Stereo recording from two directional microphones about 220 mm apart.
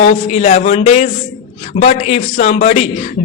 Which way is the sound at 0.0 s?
30° left (ahead or behind).